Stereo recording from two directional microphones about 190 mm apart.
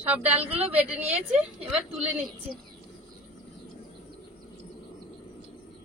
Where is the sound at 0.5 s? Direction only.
10° right (ahead or behind).